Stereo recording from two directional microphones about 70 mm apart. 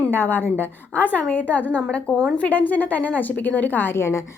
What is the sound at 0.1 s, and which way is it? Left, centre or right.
A woman's voice, left.